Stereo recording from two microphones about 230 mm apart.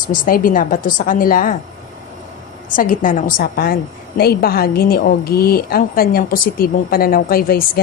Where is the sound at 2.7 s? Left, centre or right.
Left.